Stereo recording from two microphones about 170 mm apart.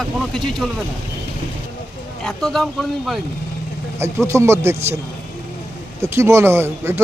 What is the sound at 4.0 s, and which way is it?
Speech, 15° right (ahead or behind).